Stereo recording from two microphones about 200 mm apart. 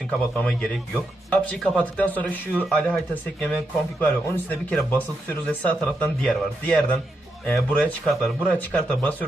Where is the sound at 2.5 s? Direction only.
5° right (ahead or behind).